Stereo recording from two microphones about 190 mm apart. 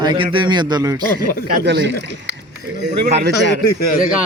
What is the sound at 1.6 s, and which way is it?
Speech, 65° right (ahead or behind).